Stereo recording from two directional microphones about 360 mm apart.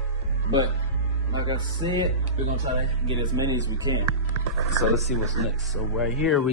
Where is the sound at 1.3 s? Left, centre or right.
Centre.